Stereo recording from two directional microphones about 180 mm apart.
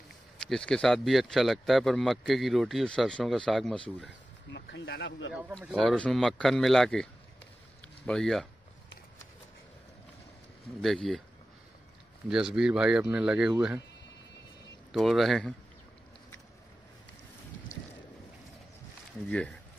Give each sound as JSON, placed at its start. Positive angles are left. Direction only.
{"t": 0.4, "sound": "speech", "side_deg": 5}
{"t": 4.5, "sound": "speech", "side_deg": 70}
{"t": 5.7, "sound": "speech", "side_deg": 0}
{"t": 10.8, "sound": "speech", "side_deg": 0}
{"t": 12.3, "sound": "speech", "side_deg": -5}
{"t": 14.9, "sound": "speech", "side_deg": 0}
{"t": 19.2, "sound": "speech", "side_deg": 5}